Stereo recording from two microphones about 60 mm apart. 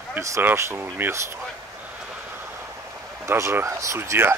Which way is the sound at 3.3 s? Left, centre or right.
Right.